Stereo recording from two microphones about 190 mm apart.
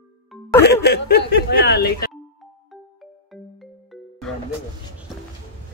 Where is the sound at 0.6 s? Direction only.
60° left (ahead or behind).